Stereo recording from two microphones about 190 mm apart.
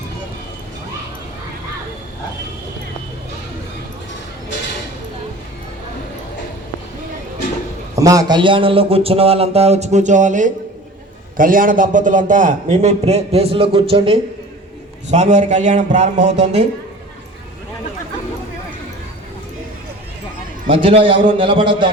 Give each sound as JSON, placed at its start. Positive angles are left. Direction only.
{"t": 7.9, "sound": "a man's voice", "side_deg": -20}
{"t": 20.7, "sound": "a man's voice", "side_deg": -30}